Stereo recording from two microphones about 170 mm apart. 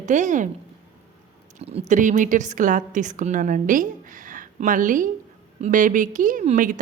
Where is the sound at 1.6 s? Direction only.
35° right (ahead or behind).